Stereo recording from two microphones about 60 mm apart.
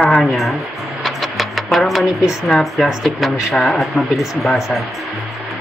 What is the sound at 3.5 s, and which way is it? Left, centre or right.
Speech, centre.